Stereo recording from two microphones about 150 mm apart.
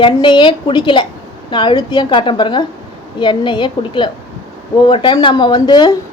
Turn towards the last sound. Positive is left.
turn(degrees=30)  # may be behind; listen again after turning